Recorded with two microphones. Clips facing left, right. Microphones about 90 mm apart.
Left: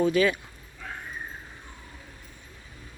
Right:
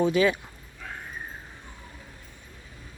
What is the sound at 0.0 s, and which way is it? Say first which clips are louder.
Speech: even; 20° right (ahead or behind).